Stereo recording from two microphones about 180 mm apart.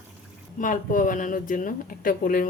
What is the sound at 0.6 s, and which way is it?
Speech, 45° left (ahead or behind).